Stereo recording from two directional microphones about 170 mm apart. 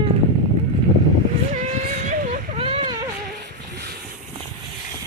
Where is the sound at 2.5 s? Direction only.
35° right (ahead or behind).